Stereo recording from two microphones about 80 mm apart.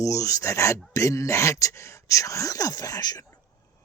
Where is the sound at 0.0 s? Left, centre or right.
Left.